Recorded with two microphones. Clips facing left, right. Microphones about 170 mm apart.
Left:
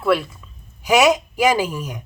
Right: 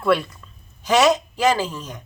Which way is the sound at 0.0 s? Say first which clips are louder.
Left 1 dB; centre (ahead or behind).